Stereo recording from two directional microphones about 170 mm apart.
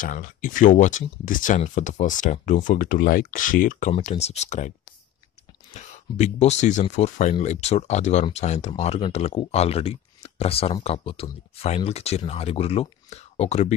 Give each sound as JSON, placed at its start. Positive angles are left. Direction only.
{"t": 0.0, "sound": "speech", "side_deg": 50}
{"t": 4.0, "sound": "speech", "side_deg": 40}